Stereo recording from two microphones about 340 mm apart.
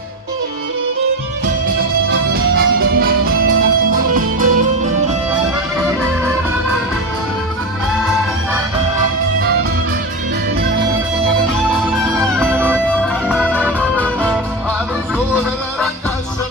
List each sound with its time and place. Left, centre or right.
2.0 s music: right
9.4 s music: right
11.9 s music: centre